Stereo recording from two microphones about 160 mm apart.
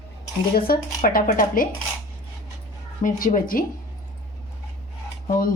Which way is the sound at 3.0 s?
55° left (ahead or behind).